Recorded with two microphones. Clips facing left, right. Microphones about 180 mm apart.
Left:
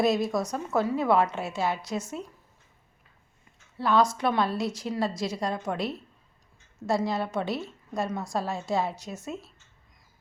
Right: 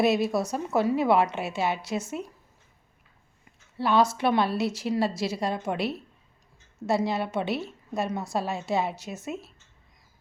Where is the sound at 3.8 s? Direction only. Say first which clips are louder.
Right 1 dB; 5° right (ahead or behind).